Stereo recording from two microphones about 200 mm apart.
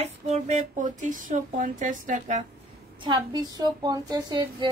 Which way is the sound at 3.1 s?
20° right (ahead or behind).